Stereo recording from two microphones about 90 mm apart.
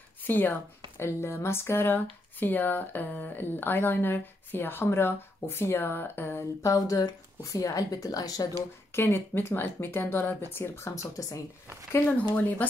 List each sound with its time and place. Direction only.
0.3 s speech: 20° left (ahead or behind)
6.6 s speech: 40° left (ahead or behind)
8.9 s speech: 25° left (ahead or behind)
11.9 s speech: 20° left (ahead or behind)